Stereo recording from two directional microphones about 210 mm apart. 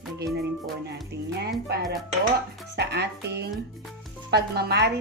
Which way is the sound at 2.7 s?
50° right (ahead or behind).